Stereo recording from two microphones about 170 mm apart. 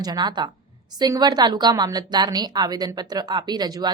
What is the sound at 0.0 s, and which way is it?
A woman's voice, 25° right (ahead or behind).